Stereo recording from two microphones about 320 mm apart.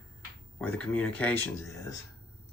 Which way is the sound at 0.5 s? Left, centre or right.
Centre.